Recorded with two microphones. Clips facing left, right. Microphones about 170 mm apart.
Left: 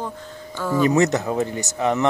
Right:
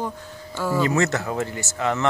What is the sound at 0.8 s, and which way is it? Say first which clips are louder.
Speech: left 5 dB; 20° left (ahead or behind).